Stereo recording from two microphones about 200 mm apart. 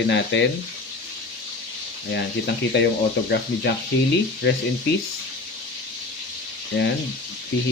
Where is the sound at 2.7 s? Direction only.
60° left (ahead or behind).